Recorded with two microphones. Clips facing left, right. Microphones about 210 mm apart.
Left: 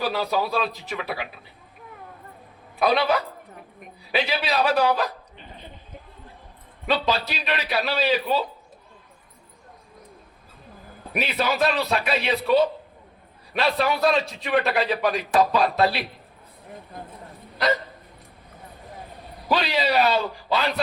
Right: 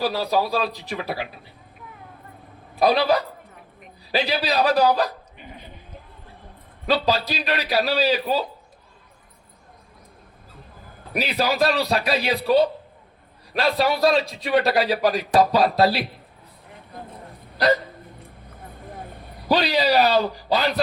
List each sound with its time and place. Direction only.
0.0 s a man's voice: 35° right (ahead or behind)
2.7 s a man's voice: 35° right (ahead or behind)
6.8 s a man's voice: 35° right (ahead or behind)
11.1 s a man's voice: 35° right (ahead or behind)
19.5 s a man's voice: 35° right (ahead or behind)